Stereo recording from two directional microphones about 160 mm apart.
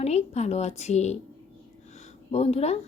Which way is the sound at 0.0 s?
45° left (ahead or behind).